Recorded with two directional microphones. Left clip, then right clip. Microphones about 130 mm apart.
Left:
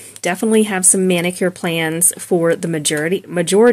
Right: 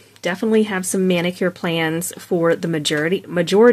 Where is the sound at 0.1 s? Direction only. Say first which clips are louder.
Left 2 dB; 25° left (ahead or behind).